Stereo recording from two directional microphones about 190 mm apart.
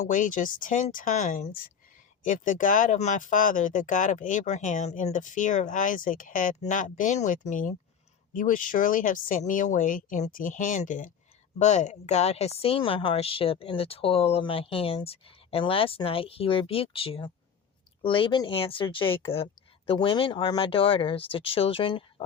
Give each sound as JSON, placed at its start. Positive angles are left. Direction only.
{"t": 0.0, "sound": "a woman's voice", "side_deg": 45}